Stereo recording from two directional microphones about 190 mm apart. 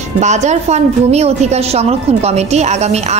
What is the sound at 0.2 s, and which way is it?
A woman's voice, 35° right (ahead or behind).